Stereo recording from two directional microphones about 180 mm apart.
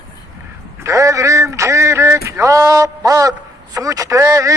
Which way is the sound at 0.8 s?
15° right (ahead or behind).